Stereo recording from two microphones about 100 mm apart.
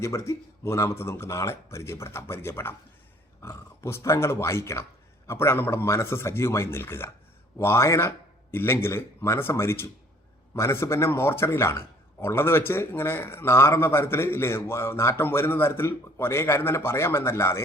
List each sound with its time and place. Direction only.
0.0 s a man's voice: 30° left (ahead or behind)